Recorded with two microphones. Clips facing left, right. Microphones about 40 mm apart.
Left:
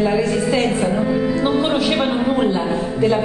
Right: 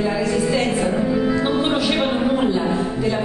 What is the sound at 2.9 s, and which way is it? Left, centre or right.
Music, left.